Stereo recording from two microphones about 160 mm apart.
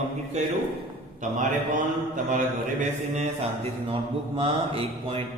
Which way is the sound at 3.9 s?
35° right (ahead or behind).